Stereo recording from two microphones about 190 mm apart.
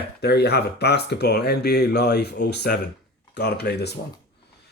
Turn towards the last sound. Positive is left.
turn(degrees=60)  # may be behind; listen again after turning